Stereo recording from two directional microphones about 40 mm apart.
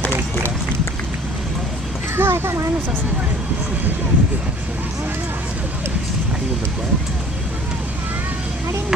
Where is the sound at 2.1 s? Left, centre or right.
Right.